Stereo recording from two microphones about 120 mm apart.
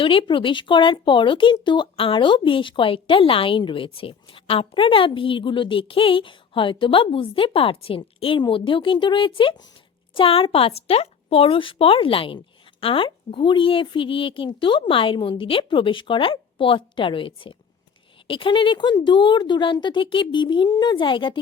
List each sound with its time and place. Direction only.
0.0 s speech: 45° left (ahead or behind)